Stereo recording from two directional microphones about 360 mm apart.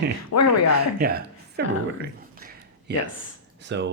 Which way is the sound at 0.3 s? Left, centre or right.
Left.